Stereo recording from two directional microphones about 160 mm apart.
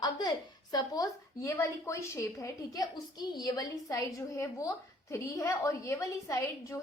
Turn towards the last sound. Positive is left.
turn(degrees=20)  # may be behind; listen again after turning